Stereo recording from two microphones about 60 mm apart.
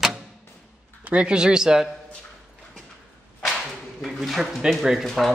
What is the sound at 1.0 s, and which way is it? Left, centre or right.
Speech, centre.